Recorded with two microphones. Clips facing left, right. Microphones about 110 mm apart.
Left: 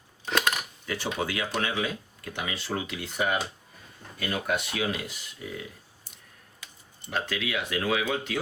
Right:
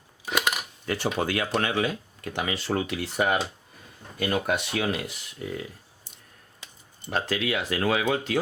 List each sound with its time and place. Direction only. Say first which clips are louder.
0.3 s dishes: even; 10° right (ahead or behind)
0.9 s speech: right 4 dB; 45° right (ahead or behind)
7.1 s speech: right 4 dB; 40° right (ahead or behind)